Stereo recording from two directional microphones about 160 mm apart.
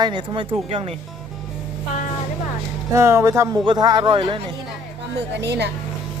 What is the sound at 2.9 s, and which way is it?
Speech, 15° right (ahead or behind).